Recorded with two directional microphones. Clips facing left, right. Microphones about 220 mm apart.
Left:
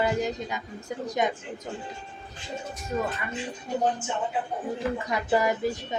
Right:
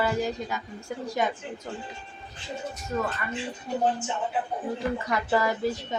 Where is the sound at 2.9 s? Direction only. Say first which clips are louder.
Even; 15° left (ahead or behind).